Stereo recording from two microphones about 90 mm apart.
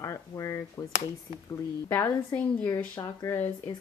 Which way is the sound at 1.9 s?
25° left (ahead or behind).